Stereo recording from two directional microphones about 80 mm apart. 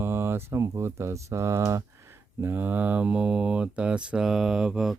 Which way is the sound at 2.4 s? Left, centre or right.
Right.